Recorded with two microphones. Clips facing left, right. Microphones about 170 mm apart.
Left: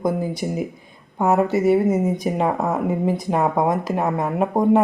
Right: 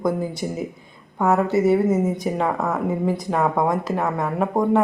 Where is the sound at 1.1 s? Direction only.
20° left (ahead or behind).